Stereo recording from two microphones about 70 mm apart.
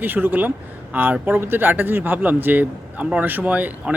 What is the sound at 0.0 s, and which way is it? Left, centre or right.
Speech, right.